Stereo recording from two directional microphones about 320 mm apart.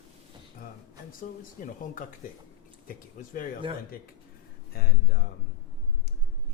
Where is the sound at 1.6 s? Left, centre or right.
Left.